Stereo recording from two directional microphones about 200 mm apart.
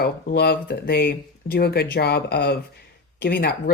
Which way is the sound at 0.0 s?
50° left (ahead or behind).